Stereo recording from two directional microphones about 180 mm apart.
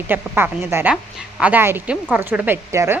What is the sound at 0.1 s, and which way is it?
A woman's voice, 10° right (ahead or behind).